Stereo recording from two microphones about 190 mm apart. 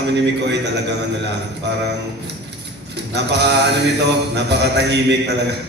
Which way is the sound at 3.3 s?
65° right (ahead or behind).